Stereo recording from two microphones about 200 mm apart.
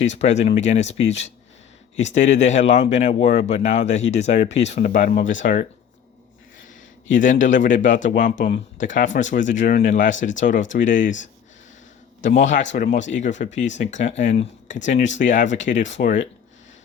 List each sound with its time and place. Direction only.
0.0 s speech: 35° left (ahead or behind)
2.0 s speech: 35° left (ahead or behind)
7.1 s speech: 40° left (ahead or behind)
12.2 s speech: 35° left (ahead or behind)